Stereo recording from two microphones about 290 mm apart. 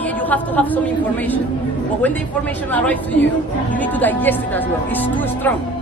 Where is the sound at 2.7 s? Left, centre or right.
Centre.